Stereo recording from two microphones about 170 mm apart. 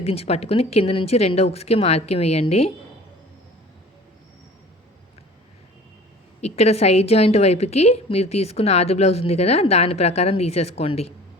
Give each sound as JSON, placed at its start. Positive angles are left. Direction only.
{"t": 0.0, "sound": "a woman's voice", "side_deg": 35}
{"t": 6.4, "sound": "a woman's voice", "side_deg": 40}